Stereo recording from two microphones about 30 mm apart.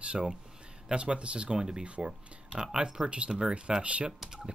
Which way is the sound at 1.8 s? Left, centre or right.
Right.